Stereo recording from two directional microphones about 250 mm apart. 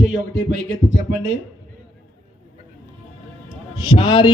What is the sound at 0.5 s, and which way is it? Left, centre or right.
Speech, left.